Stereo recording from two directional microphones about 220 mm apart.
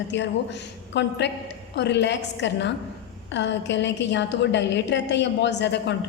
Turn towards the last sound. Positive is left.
turn(degrees=50)  # may be behind; listen again after turning